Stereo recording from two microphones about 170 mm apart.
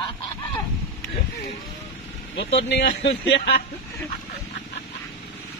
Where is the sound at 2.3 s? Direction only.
80° left.